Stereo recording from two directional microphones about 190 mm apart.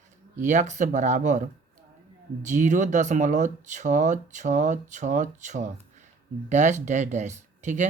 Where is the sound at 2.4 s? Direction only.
40° right (ahead or behind).